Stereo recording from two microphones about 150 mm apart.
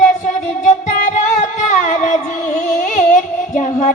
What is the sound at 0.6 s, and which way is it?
Music, 60° left (ahead or behind).